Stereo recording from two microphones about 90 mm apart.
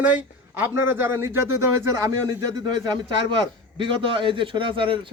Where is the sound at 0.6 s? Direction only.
25° right (ahead or behind).